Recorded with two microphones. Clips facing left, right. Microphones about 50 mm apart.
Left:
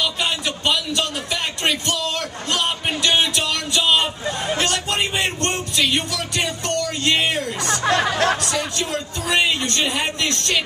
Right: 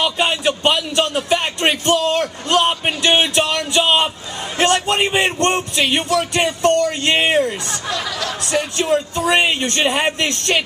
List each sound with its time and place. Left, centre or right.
0.0 s speech: right
7.6 s speech: left
8.5 s speech: right